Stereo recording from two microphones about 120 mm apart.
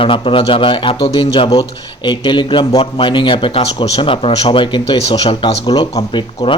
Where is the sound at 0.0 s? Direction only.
45° left (ahead or behind).